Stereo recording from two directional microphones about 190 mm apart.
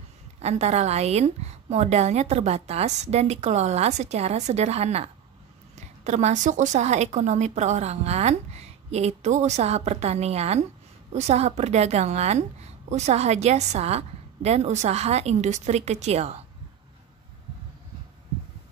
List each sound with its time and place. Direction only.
0.4 s a woman's voice: 35° right (ahead or behind)